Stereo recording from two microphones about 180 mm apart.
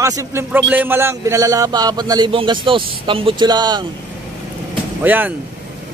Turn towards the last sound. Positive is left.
turn(degrees=-10)  # may be behind; listen again after turning